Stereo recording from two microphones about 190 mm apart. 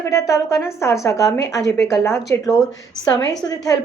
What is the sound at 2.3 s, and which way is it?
Speech, 15° left (ahead or behind).